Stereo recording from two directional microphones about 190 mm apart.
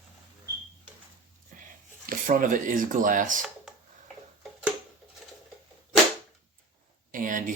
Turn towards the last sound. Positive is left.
turn(degrees=-45)  # may be behind; listen again after turning